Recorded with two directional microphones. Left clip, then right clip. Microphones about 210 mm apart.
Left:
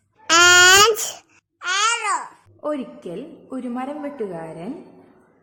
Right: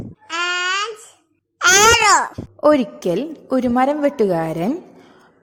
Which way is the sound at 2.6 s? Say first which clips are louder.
Right 12 dB; 40° right (ahead or behind).